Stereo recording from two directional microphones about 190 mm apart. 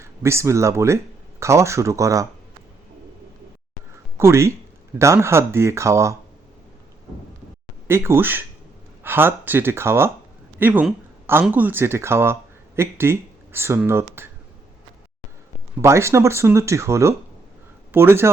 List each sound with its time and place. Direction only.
0.0 s speech: 15° right (ahead or behind)
4.2 s speech: 15° right (ahead or behind)
7.9 s speech: 15° right (ahead or behind)
15.8 s speech: 15° right (ahead or behind)